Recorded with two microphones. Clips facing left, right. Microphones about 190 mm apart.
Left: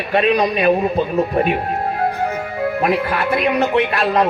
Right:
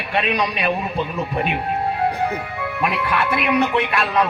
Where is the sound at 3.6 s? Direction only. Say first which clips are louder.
Left 3 dB; 40° left (ahead or behind).